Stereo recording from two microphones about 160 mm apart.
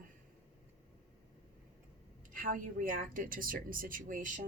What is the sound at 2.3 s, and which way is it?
A woman's voice, 60° right (ahead or behind).